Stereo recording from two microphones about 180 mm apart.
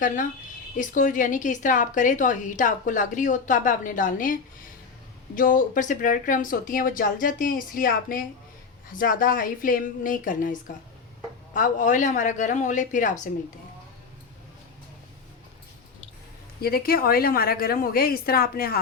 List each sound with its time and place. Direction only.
0.8 s a woman's voice: 45° left (ahead or behind)
16.6 s a woman's voice: 55° left (ahead or behind)